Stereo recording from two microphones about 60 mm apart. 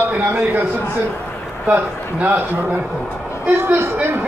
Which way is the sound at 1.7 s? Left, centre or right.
Right.